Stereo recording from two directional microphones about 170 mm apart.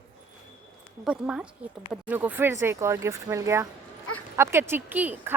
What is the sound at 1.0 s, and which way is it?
Speech, 5° right (ahead or behind).